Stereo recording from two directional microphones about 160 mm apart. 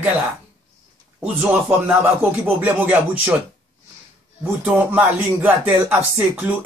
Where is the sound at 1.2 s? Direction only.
10° right (ahead or behind).